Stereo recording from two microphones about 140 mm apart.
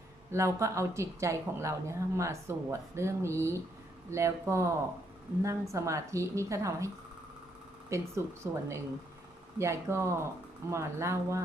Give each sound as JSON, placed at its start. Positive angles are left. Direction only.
{"t": 0.3, "sound": "speech", "side_deg": -20}